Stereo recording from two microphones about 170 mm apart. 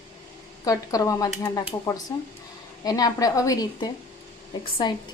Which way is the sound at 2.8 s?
20° left (ahead or behind).